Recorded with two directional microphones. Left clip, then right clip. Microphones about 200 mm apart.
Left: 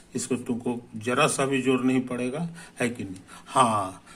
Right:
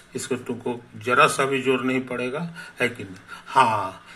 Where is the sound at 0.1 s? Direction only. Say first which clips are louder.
Right 1 dB; 20° left (ahead or behind).